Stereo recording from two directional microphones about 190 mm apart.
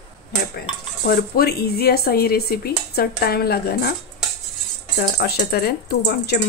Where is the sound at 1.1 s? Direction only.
55° left (ahead or behind).